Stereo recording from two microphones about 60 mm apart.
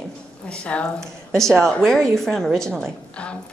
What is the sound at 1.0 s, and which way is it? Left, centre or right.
A woman's voice, centre.